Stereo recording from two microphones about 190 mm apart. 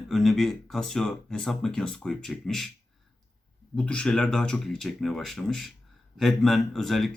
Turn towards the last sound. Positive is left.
turn(degrees=0)  # may be behind; listen again after turning